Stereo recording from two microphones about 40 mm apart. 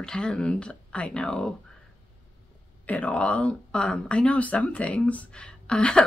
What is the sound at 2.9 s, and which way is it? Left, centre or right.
Speech, left.